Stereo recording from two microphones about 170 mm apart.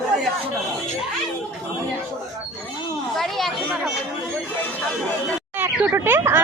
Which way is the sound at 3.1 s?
Centre (ahead or behind).